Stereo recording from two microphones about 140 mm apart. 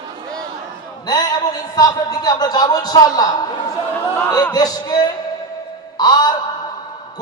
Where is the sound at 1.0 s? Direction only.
30° left (ahead or behind).